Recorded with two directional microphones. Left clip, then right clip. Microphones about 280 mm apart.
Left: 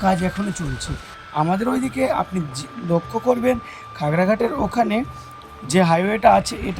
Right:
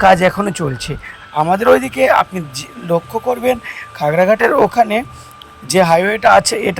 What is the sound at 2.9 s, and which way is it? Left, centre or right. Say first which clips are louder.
Speech: right 5 dB; right.